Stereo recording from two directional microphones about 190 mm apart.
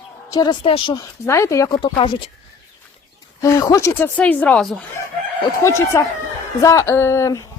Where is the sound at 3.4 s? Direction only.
15° left (ahead or behind).